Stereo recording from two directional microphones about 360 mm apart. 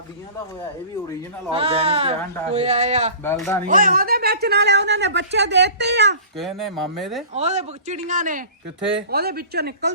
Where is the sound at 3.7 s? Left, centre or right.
Right.